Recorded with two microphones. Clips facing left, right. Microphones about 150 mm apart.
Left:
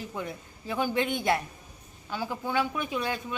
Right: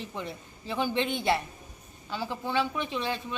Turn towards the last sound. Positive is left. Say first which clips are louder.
# left 1 dB
turn(degrees=5)  # may be behind; listen again after turning